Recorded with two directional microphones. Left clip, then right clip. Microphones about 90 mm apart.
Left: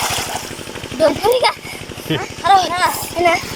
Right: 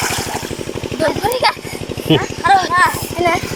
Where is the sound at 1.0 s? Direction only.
20° left (ahead or behind).